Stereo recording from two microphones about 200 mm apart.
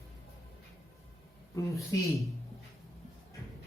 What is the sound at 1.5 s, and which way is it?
Speech, 15° left (ahead or behind).